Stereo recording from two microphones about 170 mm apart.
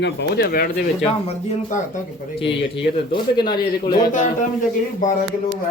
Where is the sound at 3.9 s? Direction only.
50° left (ahead or behind).